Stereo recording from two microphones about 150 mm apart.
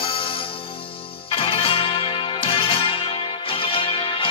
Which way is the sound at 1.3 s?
35° left (ahead or behind).